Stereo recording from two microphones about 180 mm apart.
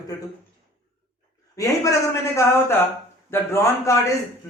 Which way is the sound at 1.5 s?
15° left (ahead or behind).